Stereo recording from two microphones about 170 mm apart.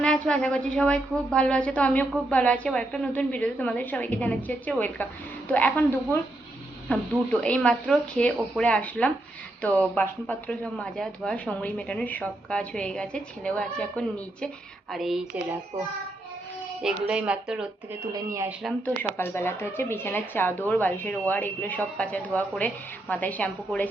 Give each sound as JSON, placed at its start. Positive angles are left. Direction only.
{"t": 0.0, "sound": "a woman's voice", "side_deg": 5}
{"t": 16.8, "sound": "speech", "side_deg": -5}
{"t": 18.0, "sound": "speech", "side_deg": -20}
{"t": 18.9, "sound": "a woman's voice", "side_deg": 15}